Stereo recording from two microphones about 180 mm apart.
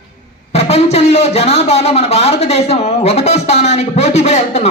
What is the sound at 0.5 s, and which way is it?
Speech, 35° left (ahead or behind).